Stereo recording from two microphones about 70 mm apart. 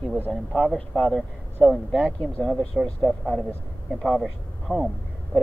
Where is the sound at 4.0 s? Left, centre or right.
Centre.